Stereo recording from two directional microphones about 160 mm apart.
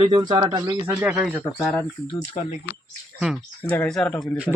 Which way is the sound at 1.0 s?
10° right (ahead or behind).